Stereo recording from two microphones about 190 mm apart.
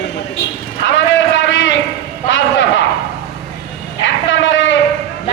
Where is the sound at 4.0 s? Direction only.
75° left (ahead or behind).